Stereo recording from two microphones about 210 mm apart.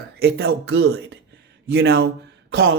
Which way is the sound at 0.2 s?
55° right (ahead or behind).